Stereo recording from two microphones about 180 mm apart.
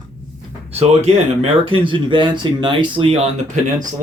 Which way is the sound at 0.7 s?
35° right (ahead or behind).